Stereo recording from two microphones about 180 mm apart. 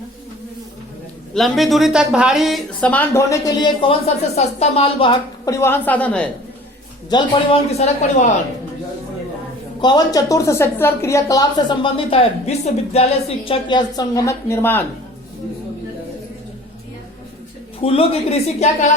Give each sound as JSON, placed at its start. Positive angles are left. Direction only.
{"t": 1.3, "sound": "a woman's voice", "side_deg": 0}
{"t": 5.5, "sound": "speech", "side_deg": 10}
{"t": 7.1, "sound": "a woman's voice", "side_deg": 25}
{"t": 7.7, "sound": "a woman's voice", "side_deg": 40}
{"t": 9.8, "sound": "a woman's voice", "side_deg": 20}
{"t": 17.8, "sound": "a woman's voice", "side_deg": 30}